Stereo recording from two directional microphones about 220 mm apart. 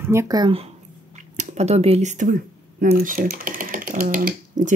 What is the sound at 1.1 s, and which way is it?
Speech, 35° right (ahead or behind).